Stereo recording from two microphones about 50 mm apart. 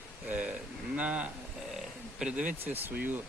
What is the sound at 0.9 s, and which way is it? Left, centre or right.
Speech, right.